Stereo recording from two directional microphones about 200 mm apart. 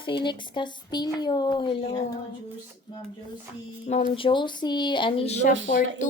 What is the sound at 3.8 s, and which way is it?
A woman's voice, 30° left (ahead or behind).